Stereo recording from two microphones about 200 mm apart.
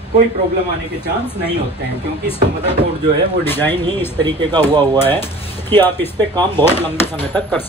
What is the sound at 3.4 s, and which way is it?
Speech, 10° left (ahead or behind).